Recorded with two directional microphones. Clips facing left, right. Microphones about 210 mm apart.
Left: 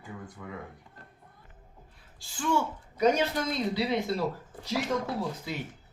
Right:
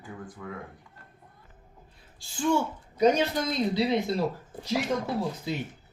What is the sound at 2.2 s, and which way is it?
A man's voice, 25° right (ahead or behind).